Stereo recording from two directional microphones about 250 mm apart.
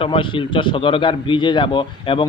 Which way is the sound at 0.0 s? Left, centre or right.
Left.